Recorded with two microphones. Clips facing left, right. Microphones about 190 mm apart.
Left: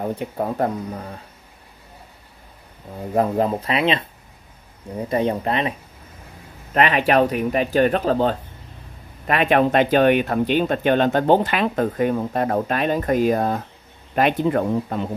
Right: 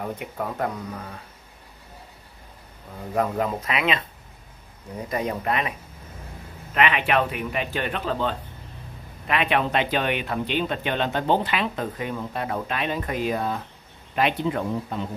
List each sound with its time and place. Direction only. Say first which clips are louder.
0.0 s speech: left 6 dB; 30° left (ahead or behind)
3.2 s speech: left 5 dB; 30° left (ahead or behind)
5.1 s speech: left 5 dB; 30° left (ahead or behind)
6.7 s speech: left 5 dB; 40° left (ahead or behind)